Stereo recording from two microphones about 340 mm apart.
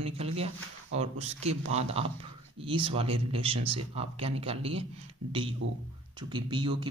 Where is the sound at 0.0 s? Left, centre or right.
Centre.